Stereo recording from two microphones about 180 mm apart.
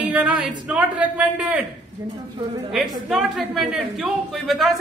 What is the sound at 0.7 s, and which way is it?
A woman's voice, 5° right (ahead or behind).